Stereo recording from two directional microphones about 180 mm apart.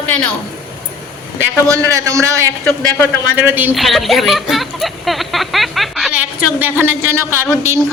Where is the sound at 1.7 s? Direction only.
20° right (ahead or behind).